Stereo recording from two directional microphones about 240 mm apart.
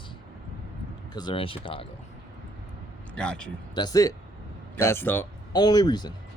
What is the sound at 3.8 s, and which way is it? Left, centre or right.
Speech, centre.